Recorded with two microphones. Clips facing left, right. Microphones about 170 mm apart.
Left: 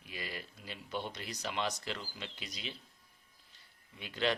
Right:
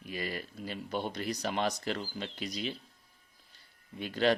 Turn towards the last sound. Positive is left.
turn(degrees=-45)  # may be behind; listen again after turning